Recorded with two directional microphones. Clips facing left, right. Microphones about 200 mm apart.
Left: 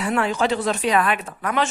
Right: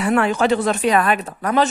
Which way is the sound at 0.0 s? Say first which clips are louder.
Right 4 dB; 55° right (ahead or behind).